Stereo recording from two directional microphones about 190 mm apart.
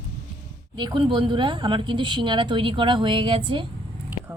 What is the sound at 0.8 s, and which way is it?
A woman's voice, 25° right (ahead or behind).